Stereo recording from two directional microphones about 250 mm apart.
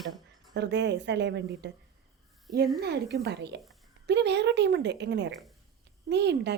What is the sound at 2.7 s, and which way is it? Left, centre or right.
A woman's voice, right.